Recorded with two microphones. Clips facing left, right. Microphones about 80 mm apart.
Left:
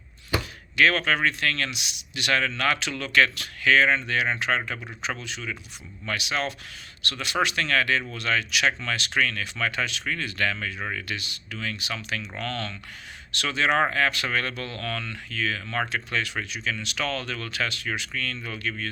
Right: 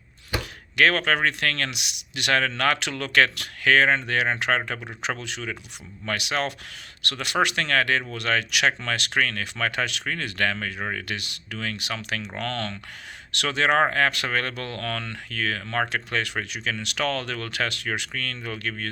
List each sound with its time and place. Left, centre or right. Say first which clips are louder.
0.8 s speech: right 1 dB; right
15.6 s speech: right 2 dB; right
15.9 s speech: right 1 dB; right